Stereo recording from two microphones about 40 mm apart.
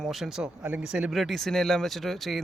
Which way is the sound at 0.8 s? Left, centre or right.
Centre.